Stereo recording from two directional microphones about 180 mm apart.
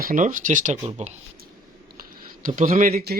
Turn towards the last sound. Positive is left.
turn(degrees=-60)  # may be behind; listen again after turning